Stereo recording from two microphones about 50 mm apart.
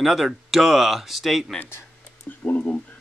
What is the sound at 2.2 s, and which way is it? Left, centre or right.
Speech, left.